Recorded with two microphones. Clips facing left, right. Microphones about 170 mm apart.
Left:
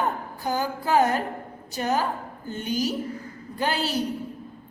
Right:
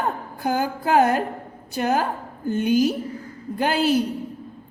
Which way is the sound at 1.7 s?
55° right (ahead or behind).